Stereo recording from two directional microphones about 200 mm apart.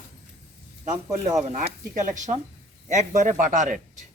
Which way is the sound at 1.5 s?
40° right (ahead or behind).